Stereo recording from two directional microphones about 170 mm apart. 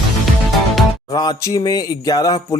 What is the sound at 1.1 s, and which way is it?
Speech, 20° left (ahead or behind).